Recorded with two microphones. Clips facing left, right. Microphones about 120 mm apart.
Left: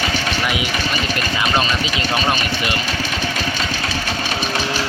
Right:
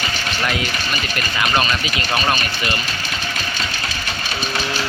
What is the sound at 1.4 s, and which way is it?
Speech, 25° left (ahead or behind).